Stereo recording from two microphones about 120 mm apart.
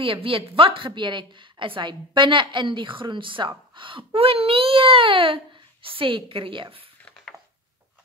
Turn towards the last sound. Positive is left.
turn(degrees=-45)  # may be behind; listen again after turning